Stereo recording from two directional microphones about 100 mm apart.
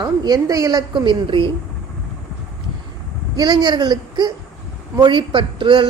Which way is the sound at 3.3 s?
45° right (ahead or behind).